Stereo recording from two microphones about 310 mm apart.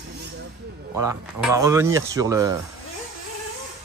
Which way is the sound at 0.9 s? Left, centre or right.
Centre.